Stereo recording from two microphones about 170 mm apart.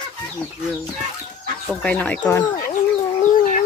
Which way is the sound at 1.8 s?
10° left (ahead or behind).